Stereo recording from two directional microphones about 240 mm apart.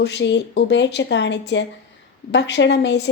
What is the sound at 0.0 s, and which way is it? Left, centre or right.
A woman's voice, left.